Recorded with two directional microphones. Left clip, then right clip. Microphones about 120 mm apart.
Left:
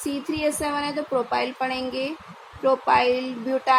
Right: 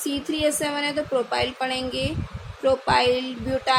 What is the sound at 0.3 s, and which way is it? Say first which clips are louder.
A woman's voice: right 1 dB; 15° left (ahead or behind).